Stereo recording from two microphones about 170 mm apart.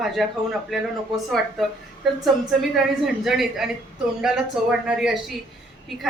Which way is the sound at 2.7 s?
Centre (ahead or behind).